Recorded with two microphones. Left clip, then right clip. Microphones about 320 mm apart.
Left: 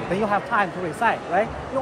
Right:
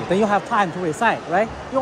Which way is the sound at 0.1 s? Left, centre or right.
Right.